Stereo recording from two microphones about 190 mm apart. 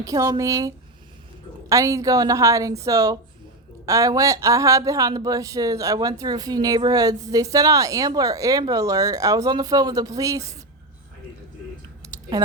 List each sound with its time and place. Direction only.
0.0 s a woman's voice: 20° right (ahead or behind)
1.7 s a woman's voice: 15° right (ahead or behind)